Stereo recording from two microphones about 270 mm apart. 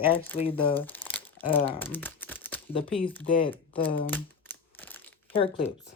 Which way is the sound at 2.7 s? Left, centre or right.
Centre.